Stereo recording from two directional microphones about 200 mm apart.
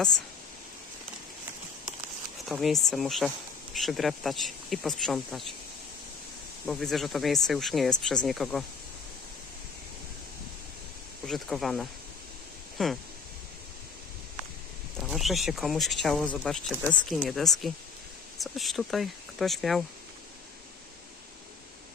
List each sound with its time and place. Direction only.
2.5 s speech: centre (ahead or behind)
6.7 s speech: centre (ahead or behind)
11.3 s speech: centre (ahead or behind)
14.9 s speech: centre (ahead or behind)